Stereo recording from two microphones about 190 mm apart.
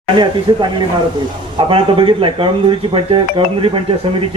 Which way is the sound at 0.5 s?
25° right (ahead or behind).